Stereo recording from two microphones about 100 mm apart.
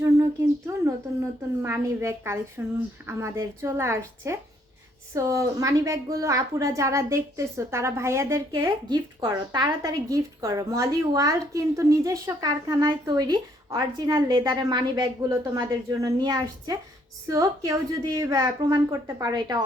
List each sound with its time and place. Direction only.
0.0 s a sound: 30° right (ahead or behind)
1.6 s a woman's voice: 25° right (ahead or behind)
8.9 s a woman's voice: 40° right (ahead or behind)
14.1 s a woman's voice: 55° right (ahead or behind)
15.3 s a woman's voice: 35° right (ahead or behind)